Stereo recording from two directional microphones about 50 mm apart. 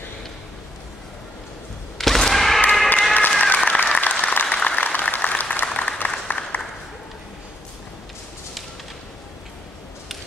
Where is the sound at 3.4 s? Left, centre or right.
Left.